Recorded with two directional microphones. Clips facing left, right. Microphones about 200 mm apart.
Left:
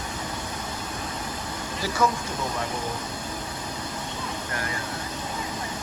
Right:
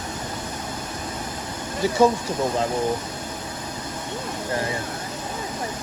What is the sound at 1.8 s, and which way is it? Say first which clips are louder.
Speech: right 7 dB; 25° right (ahead or behind).